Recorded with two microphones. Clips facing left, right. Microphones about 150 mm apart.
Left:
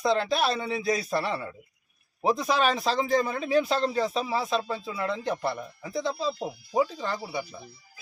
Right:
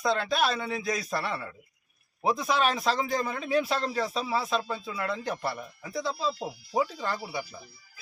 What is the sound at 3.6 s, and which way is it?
Speech, 25° left (ahead or behind).